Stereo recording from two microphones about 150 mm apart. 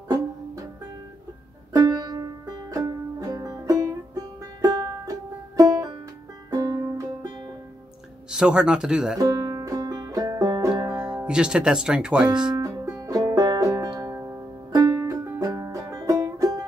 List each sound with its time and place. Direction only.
1.7 s music: 25° right (ahead or behind)
8.3 s speech: 5° right (ahead or behind)
9.2 s music: 25° right (ahead or behind)
11.2 s speech: 5° right (ahead or behind)
12.5 s music: 25° right (ahead or behind)